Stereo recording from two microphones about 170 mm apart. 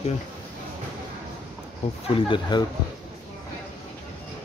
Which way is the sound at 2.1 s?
30° left (ahead or behind).